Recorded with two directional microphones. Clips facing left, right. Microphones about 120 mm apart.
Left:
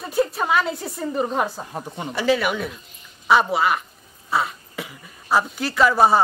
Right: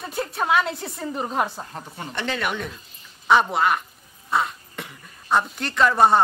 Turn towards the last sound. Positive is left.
turn(degrees=5)  # may be behind; listen again after turning